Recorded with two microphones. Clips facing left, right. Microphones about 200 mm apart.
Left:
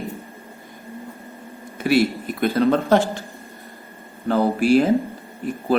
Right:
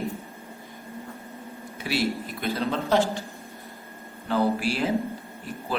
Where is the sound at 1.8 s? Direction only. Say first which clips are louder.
Left 8 dB; 55° left (ahead or behind).